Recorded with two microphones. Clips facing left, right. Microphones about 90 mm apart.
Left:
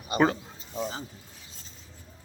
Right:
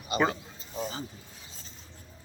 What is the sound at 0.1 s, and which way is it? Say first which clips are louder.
Speech: left 3 dB; 35° left (ahead or behind).